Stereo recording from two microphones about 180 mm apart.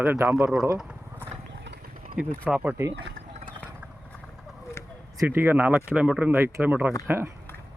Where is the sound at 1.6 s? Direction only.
60° right (ahead or behind).